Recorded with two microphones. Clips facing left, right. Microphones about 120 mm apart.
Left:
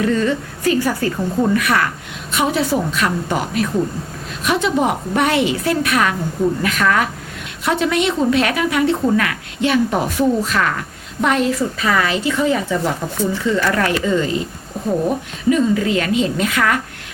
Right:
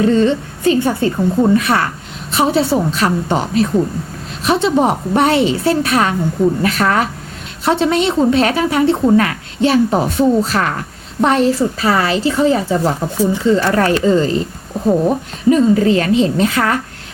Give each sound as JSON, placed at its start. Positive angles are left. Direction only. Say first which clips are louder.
{"t": 0.0, "sound": "a woman's voice", "louder": "right 5 dB", "side_deg": -30}
{"t": 15.4, "sound": "a woman's voice", "louder": "right 5 dB", "side_deg": -35}